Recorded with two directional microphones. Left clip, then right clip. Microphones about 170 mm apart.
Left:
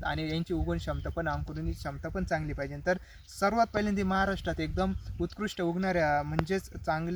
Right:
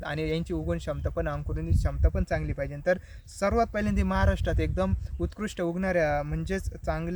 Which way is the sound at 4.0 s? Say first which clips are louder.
Right 1 dB; 15° right (ahead or behind).